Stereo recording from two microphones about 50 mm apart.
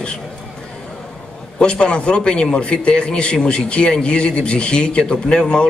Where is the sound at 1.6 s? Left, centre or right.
Left.